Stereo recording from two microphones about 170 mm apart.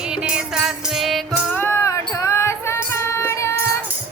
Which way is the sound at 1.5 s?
15° left (ahead or behind).